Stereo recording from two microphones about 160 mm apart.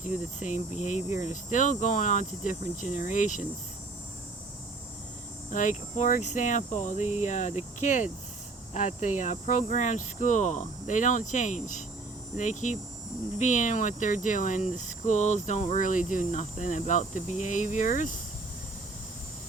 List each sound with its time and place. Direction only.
0.3 s speech: 50° left (ahead or behind)
5.5 s speech: 55° left (ahead or behind)